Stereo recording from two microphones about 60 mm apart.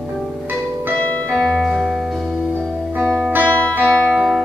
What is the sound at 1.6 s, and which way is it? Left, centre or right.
Music, centre.